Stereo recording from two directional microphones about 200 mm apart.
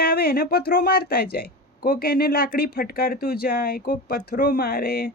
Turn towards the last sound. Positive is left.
turn(degrees=50)  # may be behind; listen again after turning